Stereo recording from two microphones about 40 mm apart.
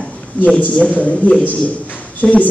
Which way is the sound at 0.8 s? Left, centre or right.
Left.